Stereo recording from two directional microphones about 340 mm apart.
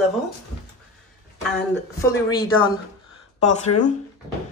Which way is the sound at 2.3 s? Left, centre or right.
Centre.